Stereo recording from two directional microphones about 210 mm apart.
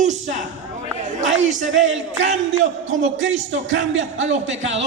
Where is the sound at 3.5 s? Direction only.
65° right (ahead or behind).